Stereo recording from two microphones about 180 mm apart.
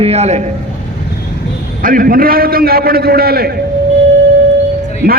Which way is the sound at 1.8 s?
50° right (ahead or behind).